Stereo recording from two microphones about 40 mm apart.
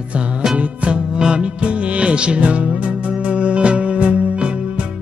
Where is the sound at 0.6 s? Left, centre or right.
Right.